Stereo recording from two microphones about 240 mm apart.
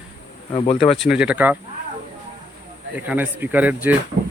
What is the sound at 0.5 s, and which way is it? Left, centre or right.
Speech, centre.